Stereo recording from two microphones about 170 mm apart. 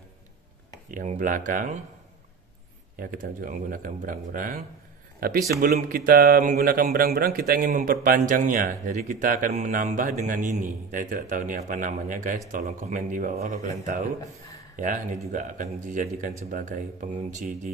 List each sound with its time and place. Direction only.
0.9 s speech: 50° right (ahead or behind)
3.0 s speech: 55° right (ahead or behind)
15.3 s speech: 50° right (ahead or behind)